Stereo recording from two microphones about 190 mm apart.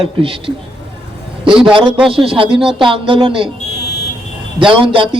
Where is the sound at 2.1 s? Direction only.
25° right (ahead or behind).